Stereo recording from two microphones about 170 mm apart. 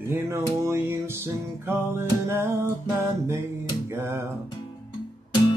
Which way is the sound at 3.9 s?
15° right (ahead or behind).